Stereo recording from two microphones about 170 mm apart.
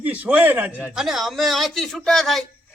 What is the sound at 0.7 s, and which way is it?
Speech, 10° left (ahead or behind).